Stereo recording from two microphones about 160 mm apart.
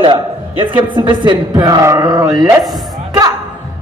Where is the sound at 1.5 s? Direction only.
25° right (ahead or behind).